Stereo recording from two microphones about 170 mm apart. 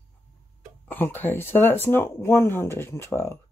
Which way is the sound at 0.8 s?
10° left (ahead or behind).